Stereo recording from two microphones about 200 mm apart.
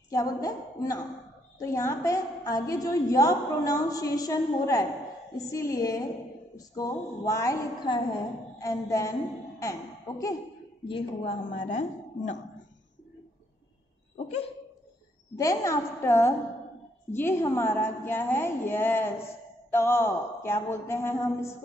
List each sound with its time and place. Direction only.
0.1 s a woman's voice: 15° left (ahead or behind)
10.9 s a woman's voice: 30° left (ahead or behind)
14.1 s a sound: 35° left (ahead or behind)
15.3 s a woman's voice: 15° left (ahead or behind)